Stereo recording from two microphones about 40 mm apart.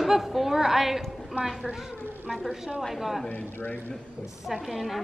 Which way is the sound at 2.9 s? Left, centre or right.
Centre.